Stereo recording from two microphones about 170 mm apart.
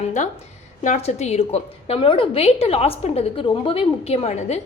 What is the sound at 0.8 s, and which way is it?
A woman's voice, 40° left (ahead or behind).